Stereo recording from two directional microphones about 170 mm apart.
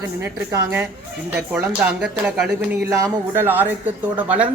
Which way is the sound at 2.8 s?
20° right (ahead or behind).